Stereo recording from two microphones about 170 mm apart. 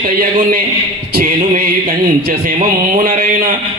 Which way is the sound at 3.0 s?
45° right (ahead or behind).